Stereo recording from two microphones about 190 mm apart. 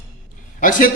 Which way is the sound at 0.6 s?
45° left (ahead or behind).